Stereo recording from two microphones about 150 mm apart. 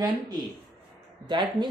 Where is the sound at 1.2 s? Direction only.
30° right (ahead or behind).